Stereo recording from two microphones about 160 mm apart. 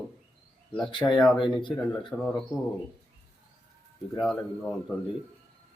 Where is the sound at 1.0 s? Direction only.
15° left (ahead or behind).